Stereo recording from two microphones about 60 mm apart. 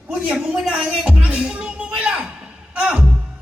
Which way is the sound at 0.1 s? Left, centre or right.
Centre.